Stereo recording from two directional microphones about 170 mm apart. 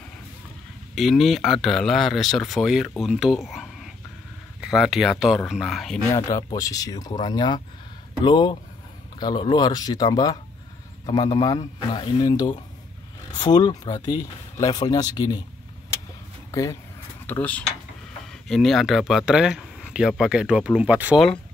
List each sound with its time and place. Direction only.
0.9 s speech: centre (ahead or behind)
6.0 s speech: 15° left (ahead or behind)
17.3 s cutlery: 10° left (ahead or behind)
18.5 s speech: centre (ahead or behind)